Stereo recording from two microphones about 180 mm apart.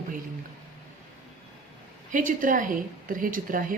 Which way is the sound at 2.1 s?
45° right (ahead or behind).